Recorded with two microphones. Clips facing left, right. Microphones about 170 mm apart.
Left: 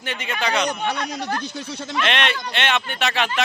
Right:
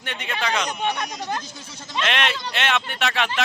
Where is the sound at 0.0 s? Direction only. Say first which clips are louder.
Left 2 dB; centre (ahead or behind).